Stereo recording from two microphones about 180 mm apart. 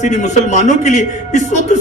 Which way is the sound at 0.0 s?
40° left (ahead or behind).